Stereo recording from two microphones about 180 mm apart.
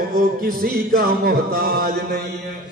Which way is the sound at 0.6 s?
55° right (ahead or behind).